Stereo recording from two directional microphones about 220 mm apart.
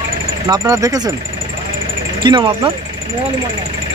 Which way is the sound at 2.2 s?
20° right (ahead or behind).